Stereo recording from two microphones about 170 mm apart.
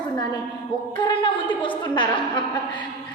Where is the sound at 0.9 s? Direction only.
25° left (ahead or behind).